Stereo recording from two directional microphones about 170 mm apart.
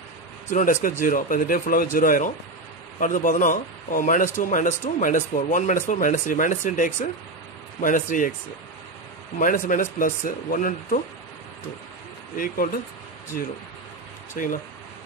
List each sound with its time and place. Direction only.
0.5 s a man's voice: 45° left (ahead or behind)
9.4 s a man's voice: 50° left (ahead or behind)
13.3 s a man's voice: 55° left (ahead or behind)